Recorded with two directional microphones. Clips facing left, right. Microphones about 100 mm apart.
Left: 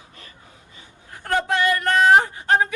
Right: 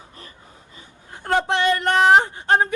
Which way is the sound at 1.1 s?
25° right (ahead or behind).